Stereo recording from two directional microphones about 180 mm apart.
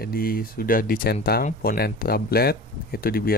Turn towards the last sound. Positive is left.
turn(degrees=55)  # may be behind; listen again after turning